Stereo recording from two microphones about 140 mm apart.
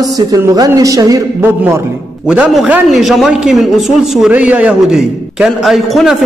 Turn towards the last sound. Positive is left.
turn(degrees=0)  # may be behind; listen again after turning